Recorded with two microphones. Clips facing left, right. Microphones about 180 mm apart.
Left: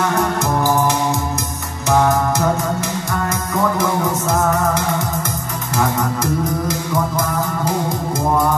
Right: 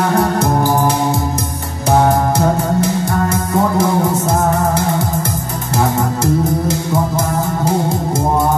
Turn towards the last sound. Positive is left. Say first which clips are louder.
# right 3 dB
turn(degrees=-30)  # may be behind; listen again after turning